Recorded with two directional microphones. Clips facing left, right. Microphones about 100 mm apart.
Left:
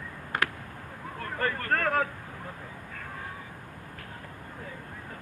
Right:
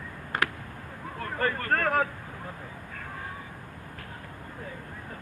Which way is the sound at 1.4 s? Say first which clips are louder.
Right 1 dB; 25° right (ahead or behind).